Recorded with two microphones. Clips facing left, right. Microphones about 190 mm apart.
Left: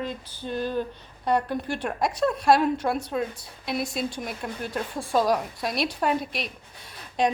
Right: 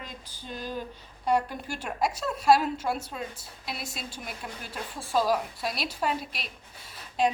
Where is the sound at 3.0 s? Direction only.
60° left (ahead or behind).